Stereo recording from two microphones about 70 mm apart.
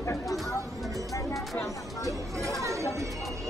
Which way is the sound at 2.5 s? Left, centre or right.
Right.